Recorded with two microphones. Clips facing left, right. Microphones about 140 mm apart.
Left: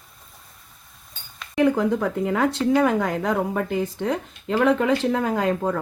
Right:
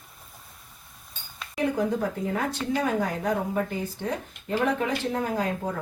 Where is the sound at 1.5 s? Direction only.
80° left.